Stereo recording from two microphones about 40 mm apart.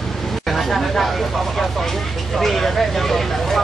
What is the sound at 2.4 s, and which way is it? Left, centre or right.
Vehicle, centre.